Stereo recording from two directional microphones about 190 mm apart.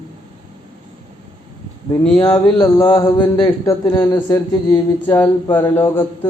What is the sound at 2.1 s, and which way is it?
Speech, 25° left (ahead or behind).